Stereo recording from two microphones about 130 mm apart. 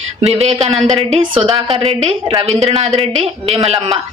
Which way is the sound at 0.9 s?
55° right (ahead or behind).